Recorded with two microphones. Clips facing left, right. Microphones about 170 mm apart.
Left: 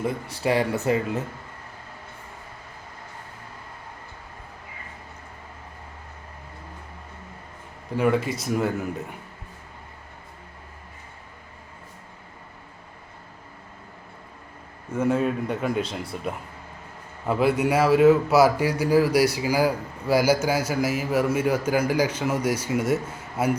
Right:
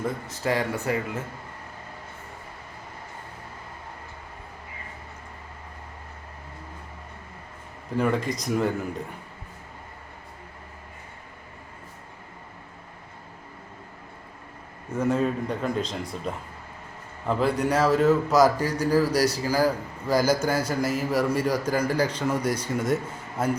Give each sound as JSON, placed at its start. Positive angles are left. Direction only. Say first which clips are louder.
{"t": 0.0, "sound": "a man's voice", "louder": "left 2 dB", "side_deg": 15}
{"t": 7.9, "sound": "speech", "louder": "left 2 dB", "side_deg": 5}
{"t": 14.9, "sound": "a man's voice", "louder": "left 1 dB", "side_deg": 5}